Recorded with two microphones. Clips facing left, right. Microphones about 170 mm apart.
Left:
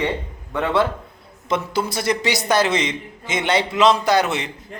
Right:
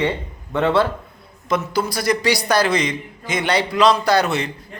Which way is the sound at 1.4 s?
25° left (ahead or behind).